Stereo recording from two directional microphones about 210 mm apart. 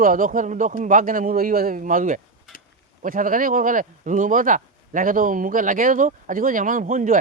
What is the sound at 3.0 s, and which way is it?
Speech, 40° right (ahead or behind).